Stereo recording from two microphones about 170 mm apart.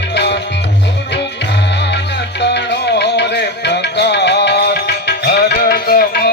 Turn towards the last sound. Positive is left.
turn(degrees=65)  # may be behind; listen again after turning